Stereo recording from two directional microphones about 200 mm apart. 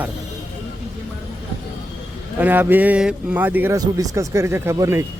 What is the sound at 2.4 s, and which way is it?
A man's voice, 10° right (ahead or behind).